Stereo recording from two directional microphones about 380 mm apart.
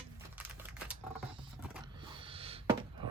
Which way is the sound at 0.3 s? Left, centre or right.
Centre.